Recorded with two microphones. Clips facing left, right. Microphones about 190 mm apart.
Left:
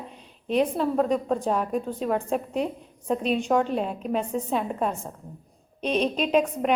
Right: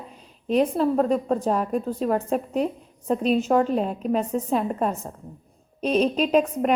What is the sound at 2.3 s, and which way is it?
Speech, 40° right (ahead or behind).